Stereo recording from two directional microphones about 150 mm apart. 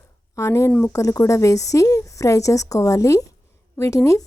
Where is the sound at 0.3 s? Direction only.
20° left (ahead or behind).